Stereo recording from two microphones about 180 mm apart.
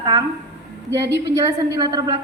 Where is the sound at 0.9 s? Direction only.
70° right (ahead or behind).